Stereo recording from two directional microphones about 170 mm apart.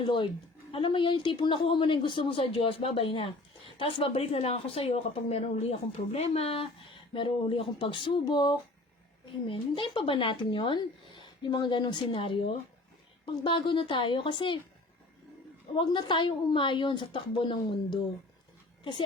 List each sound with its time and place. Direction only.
0.0 s a woman's voice: 30° left (ahead or behind)
15.7 s speech: 25° left (ahead or behind)